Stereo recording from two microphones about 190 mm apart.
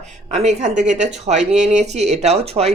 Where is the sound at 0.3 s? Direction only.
35° right (ahead or behind).